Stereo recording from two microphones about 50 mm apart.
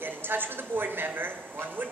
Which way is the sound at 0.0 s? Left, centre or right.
Right.